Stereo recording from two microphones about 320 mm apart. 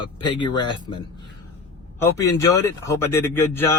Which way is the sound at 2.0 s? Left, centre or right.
Centre.